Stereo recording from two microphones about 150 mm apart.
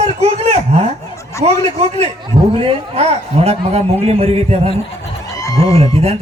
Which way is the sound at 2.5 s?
40° right (ahead or behind).